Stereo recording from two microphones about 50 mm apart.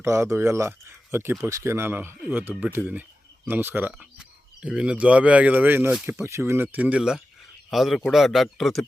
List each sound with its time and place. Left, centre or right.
0.0 s speech: right
1.1 s speech: right
1.5 s speech: right
2.8 s speech: centre
3.5 s speech: right
4.7 s speech: right
6.2 s speech: right
6.7 s speech: right
7.7 s speech: centre
8.5 s speech: centre